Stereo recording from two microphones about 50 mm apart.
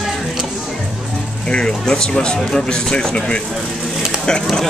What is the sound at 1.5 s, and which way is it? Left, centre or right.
Speech, centre.